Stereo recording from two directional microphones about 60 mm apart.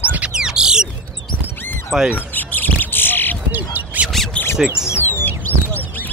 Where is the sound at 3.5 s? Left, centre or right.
Right.